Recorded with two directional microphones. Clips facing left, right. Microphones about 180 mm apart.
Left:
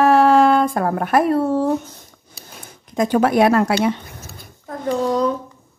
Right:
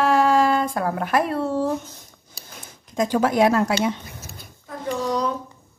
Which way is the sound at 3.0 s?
60° left (ahead or behind).